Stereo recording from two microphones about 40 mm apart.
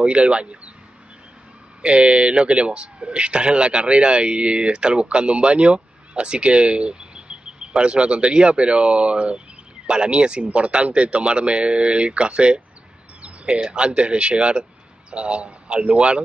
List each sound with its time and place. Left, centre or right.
0.0 s speech: right
1.8 s speech: right